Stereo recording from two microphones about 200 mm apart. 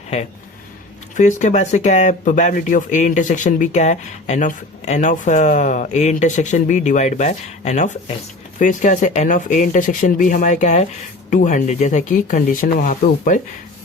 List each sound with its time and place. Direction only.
1.1 s speech: 35° left (ahead or behind)